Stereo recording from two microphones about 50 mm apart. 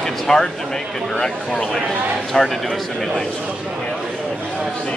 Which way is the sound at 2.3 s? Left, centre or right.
Centre.